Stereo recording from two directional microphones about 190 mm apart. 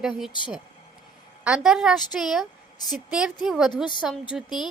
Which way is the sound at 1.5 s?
5° right (ahead or behind).